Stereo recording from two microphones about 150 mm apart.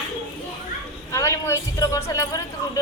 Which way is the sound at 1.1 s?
20° left (ahead or behind).